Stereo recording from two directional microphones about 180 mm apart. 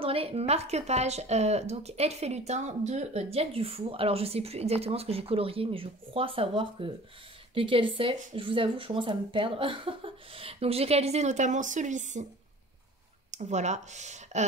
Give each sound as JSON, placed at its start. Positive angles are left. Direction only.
{"t": 0.0, "sound": "speech", "side_deg": -30}
{"t": 13.3, "sound": "speech", "side_deg": -40}